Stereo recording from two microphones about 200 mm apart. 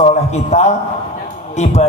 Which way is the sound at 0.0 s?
35° left (ahead or behind).